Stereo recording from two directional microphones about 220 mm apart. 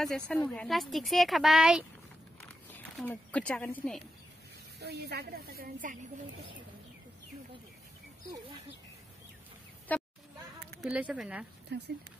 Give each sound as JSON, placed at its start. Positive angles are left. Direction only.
{"t": 0.0, "sound": "a woman's voice", "side_deg": 5}
{"t": 4.7, "sound": "speech", "side_deg": -50}
{"t": 8.3, "sound": "speech", "side_deg": -25}
{"t": 9.9, "sound": "a sound", "side_deg": 10}
{"t": 10.8, "sound": "a woman's voice", "side_deg": -5}
{"t": 11.7, "sound": "speech", "side_deg": -50}